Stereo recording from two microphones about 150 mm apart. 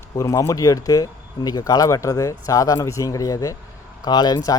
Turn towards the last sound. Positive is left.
turn(degrees=25)  # may be behind; listen again after turning